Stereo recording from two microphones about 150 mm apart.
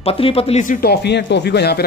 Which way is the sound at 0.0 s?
40° left (ahead or behind).